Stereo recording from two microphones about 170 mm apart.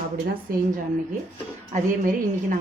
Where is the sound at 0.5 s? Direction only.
60° right (ahead or behind).